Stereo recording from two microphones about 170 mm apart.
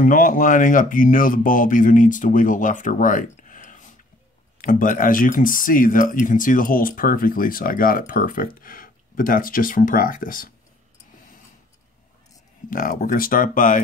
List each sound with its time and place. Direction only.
0.0 s speech: 50° left (ahead or behind)
12.6 s speech: 55° left (ahead or behind)